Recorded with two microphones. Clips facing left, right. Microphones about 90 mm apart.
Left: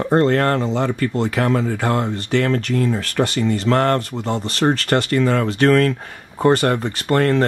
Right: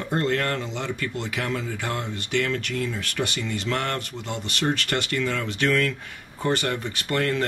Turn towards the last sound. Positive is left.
turn(degrees=40)  # may be behind; listen again after turning